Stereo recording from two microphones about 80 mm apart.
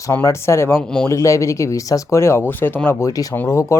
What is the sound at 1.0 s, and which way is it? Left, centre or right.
Speech, left.